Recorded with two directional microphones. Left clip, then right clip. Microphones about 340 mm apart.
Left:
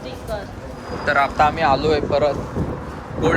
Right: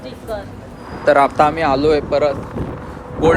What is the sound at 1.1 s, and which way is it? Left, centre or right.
Speech, centre.